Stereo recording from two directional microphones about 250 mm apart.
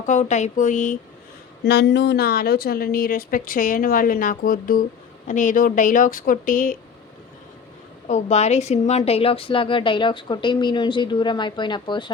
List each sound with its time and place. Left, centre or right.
0.0 s a woman's voice: left
1.6 s a woman's voice: left
8.0 s a woman's voice: left